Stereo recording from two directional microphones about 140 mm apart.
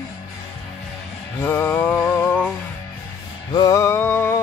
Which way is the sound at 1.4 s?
15° left (ahead or behind).